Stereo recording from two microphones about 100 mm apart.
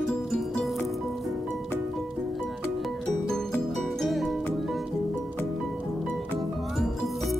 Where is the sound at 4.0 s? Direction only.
Centre (ahead or behind).